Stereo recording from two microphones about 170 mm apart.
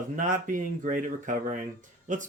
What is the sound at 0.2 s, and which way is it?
Speech, 50° right (ahead or behind).